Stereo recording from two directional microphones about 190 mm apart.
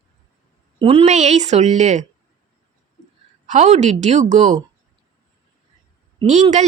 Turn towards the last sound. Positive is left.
turn(degrees=-40)  # may be behind; listen again after turning